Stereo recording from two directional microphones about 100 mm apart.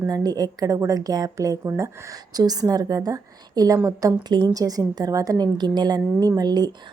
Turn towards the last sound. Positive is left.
turn(degrees=-45)  # may be behind; listen again after turning